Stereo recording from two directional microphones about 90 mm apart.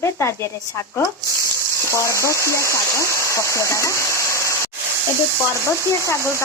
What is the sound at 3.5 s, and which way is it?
Waterfall, 35° left (ahead or behind).